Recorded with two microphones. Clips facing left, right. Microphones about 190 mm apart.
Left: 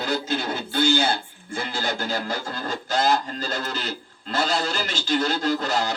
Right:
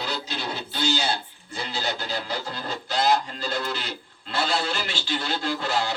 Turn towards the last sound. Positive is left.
turn(degrees=40)  # may be behind; listen again after turning